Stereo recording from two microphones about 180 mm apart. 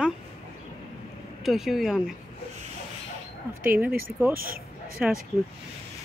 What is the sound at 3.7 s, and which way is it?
Speech, 10° right (ahead or behind).